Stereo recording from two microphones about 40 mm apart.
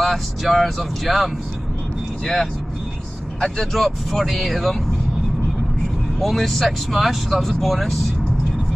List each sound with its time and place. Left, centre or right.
0.0 s speech: centre
1.0 s speech: centre
3.3 s speech: centre
3.7 s speech: centre
6.1 s speech: centre